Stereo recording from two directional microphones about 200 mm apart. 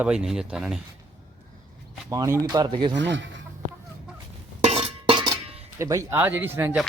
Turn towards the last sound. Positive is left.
turn(degrees=-10)  # may be behind; listen again after turning